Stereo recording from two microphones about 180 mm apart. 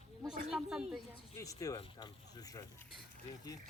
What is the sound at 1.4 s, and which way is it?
Speech, 20° left (ahead or behind).